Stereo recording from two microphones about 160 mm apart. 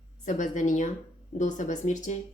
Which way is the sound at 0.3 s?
50° left (ahead or behind).